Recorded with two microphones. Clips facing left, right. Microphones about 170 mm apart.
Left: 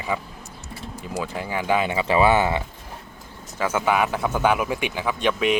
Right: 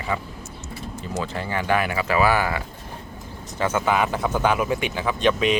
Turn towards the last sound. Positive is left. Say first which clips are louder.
# right 1 dB
turn(degrees=10)  # may be behind; listen again after turning